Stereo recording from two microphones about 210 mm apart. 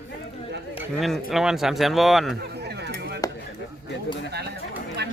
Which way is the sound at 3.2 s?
15° left (ahead or behind).